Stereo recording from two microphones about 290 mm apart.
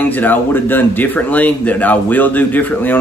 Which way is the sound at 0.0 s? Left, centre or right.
Centre.